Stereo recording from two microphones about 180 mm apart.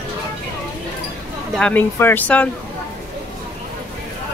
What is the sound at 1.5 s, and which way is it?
Speech, 5° left (ahead or behind).